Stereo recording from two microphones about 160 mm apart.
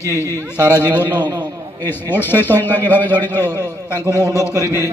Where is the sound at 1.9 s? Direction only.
15° left (ahead or behind).